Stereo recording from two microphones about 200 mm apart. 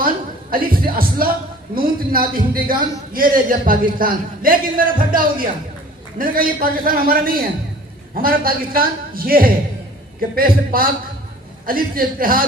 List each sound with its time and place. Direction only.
0.5 s a man's voice: 45° right (ahead or behind)